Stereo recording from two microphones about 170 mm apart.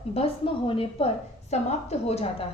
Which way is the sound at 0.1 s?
35° left (ahead or behind).